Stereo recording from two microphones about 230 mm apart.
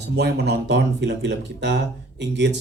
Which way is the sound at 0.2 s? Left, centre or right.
Right.